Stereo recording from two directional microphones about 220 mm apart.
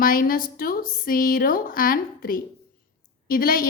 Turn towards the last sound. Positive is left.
turn(degrees=40)  # may be behind; listen again after turning